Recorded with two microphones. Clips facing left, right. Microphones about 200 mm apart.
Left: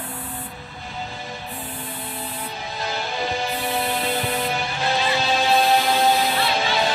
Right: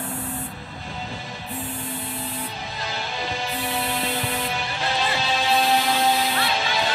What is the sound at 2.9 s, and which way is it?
Music, 50° left (ahead or behind).